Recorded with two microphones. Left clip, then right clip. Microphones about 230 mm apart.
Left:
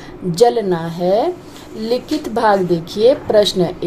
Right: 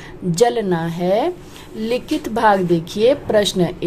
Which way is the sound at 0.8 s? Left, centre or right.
Right.